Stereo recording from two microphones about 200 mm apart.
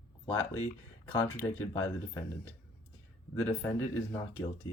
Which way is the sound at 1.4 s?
10° left (ahead or behind).